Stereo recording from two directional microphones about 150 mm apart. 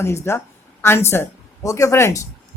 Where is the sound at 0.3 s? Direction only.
15° left (ahead or behind).